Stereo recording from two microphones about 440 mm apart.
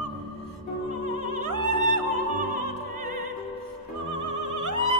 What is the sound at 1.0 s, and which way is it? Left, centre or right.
Opera, right.